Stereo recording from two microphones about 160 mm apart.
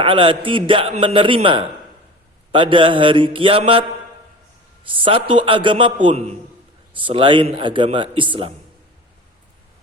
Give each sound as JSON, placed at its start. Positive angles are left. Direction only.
{"t": 0.0, "sound": "a man's voice", "side_deg": -35}
{"t": 4.9, "sound": "a man's voice", "side_deg": -35}